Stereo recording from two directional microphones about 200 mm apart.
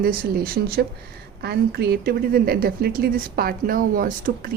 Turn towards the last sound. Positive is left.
turn(degrees=-45)  # may be behind; listen again after turning